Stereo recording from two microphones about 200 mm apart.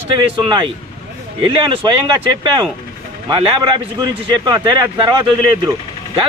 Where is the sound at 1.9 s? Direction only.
25° right (ahead or behind).